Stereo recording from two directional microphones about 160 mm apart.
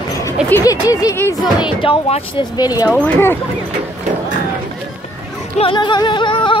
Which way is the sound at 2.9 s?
15° left (ahead or behind).